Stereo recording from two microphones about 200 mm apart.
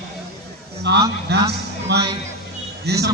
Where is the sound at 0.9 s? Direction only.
55° right (ahead or behind).